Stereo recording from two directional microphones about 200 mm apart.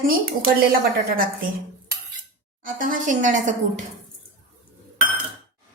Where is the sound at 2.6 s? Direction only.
40° right (ahead or behind).